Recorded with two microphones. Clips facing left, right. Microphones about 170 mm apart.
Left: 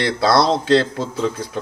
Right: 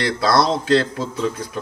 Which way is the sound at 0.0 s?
25° left (ahead or behind).